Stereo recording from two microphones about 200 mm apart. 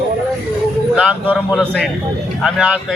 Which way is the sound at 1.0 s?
Centre (ahead or behind).